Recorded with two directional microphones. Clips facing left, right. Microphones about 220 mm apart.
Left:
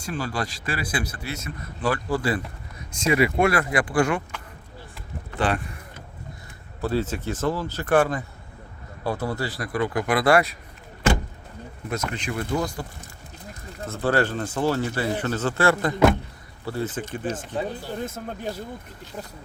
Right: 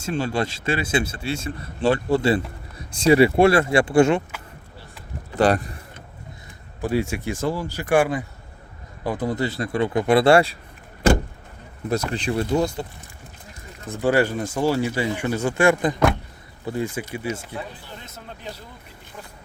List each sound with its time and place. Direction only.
0.0 s a man's voice: 25° right (ahead or behind)
5.4 s speech: 40° right (ahead or behind)
6.8 s a man's voice: 15° right (ahead or behind); by 10.6 s 30° right (ahead or behind)
11.9 s a man's voice: 35° right (ahead or behind)
13.8 s speech: 15° right (ahead or behind)
18.0 s speech: 50° left (ahead or behind)